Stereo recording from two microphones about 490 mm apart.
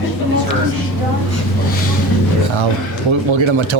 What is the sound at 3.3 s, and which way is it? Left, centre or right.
Speech, right.